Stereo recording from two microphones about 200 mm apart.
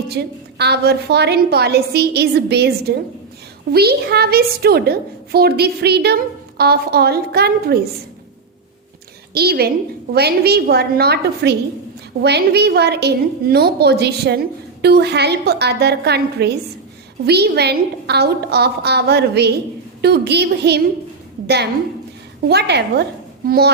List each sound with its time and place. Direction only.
0.1 s a woman's voice: 55° right (ahead or behind)
9.3 s a woman's voice: 50° right (ahead or behind)